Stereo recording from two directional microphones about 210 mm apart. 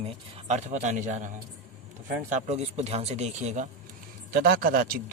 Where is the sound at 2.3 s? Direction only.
30° right (ahead or behind).